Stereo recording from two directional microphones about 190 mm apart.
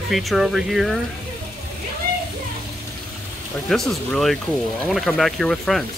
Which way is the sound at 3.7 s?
Centre (ahead or behind).